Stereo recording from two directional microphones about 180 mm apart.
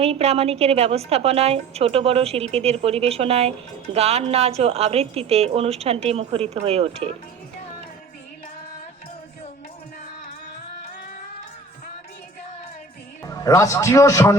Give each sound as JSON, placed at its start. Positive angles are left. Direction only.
{"t": 0.0, "sound": "a woman's voice", "side_deg": -35}
{"t": 13.2, "sound": "a man's voice", "side_deg": 20}